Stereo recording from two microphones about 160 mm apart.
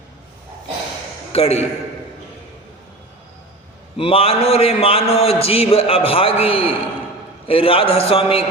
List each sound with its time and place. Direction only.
1.3 s a man's voice: 40° left (ahead or behind)
3.9 s a man's voice: 35° left (ahead or behind)